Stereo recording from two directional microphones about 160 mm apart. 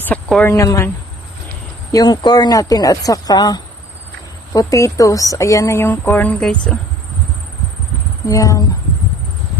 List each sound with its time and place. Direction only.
0.0 s speech: 10° left (ahead or behind)
0.5 s speech: 20° left (ahead or behind)
8.3 s speech: 20° left (ahead or behind)